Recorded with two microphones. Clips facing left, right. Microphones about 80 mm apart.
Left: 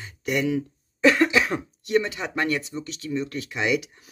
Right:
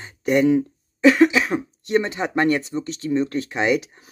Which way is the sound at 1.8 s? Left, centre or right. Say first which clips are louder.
Right 2 dB; right.